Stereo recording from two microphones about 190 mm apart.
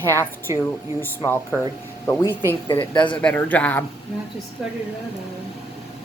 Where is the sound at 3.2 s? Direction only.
10° left (ahead or behind).